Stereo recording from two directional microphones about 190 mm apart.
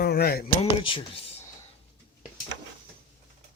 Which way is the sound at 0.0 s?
55° left (ahead or behind).